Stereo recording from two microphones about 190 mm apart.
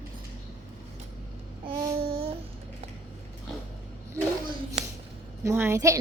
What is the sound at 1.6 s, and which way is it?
Babbling, 20° right (ahead or behind).